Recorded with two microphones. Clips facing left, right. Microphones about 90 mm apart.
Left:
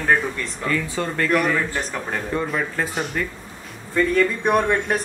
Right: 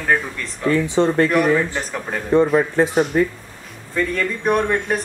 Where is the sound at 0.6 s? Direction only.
25° right (ahead or behind).